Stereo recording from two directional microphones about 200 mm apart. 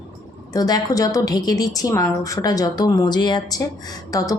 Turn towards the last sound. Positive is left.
turn(degrees=15)  # may be behind; listen again after turning